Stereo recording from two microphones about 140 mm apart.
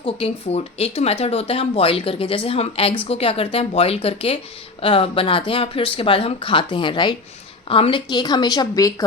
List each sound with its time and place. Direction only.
0.0 s speech: 45° left (ahead or behind); by 9.0 s 25° left (ahead or behind)